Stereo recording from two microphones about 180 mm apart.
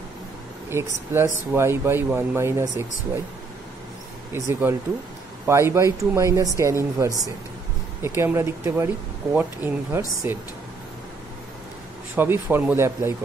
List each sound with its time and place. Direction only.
0.7 s speech: 15° right (ahead or behind)
4.3 s speech: 15° right (ahead or behind)
12.2 s speech: 10° right (ahead or behind)